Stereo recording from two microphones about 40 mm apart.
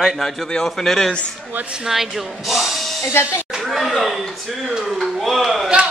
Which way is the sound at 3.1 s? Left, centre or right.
Left.